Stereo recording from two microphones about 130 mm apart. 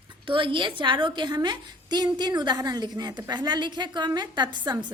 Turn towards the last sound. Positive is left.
turn(degrees=-35)  # may be behind; listen again after turning